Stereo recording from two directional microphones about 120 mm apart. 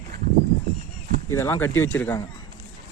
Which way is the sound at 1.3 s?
20° left (ahead or behind).